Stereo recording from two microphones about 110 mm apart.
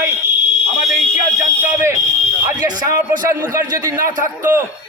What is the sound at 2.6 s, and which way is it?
Speech, 40° right (ahead or behind).